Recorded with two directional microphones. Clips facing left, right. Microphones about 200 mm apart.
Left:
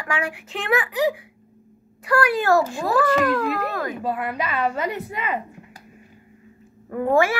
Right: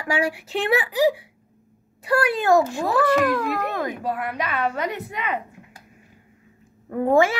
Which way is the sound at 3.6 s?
20° right (ahead or behind).